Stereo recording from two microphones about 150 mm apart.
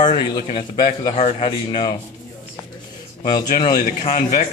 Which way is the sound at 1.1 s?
45° left (ahead or behind).